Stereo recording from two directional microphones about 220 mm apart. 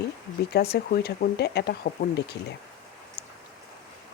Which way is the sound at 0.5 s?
45° left (ahead or behind).